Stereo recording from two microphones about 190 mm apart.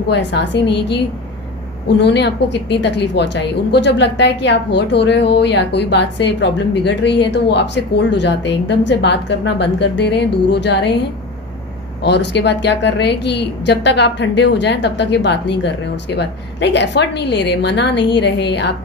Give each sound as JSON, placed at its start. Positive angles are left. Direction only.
{"t": 0.1, "sound": "a woman's voice", "side_deg": 65}
{"t": 12.0, "sound": "a woman's voice", "side_deg": 65}